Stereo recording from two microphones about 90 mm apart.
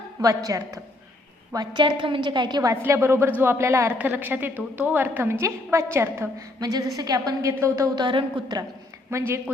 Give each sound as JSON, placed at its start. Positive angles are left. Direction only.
{"t": 0.2, "sound": "a woman's voice", "side_deg": -40}
{"t": 1.5, "sound": "a woman's voice", "side_deg": -60}
{"t": 2.6, "sound": "a woman's voice", "side_deg": -30}
{"t": 3.9, "sound": "a woman's voice", "side_deg": -20}
{"t": 6.6, "sound": "a woman's voice", "side_deg": -45}
{"t": 7.9, "sound": "a woman's voice", "side_deg": -55}
{"t": 9.0, "sound": "a woman's voice", "side_deg": -30}